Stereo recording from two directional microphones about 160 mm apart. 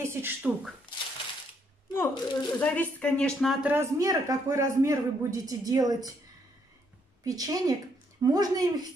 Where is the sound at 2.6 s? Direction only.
10° left (ahead or behind).